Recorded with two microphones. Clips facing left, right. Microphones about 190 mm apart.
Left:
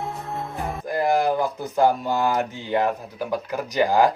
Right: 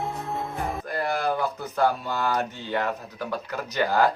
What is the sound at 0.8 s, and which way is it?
A man's voice, 15° left (ahead or behind).